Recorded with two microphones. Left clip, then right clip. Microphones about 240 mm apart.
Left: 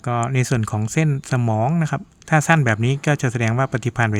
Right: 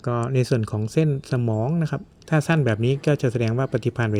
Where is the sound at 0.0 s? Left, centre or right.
Centre.